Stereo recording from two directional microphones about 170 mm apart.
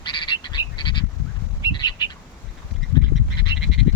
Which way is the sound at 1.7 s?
25° left (ahead or behind).